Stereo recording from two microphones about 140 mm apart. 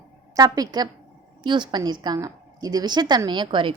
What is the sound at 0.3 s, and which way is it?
A woman's voice, 25° right (ahead or behind).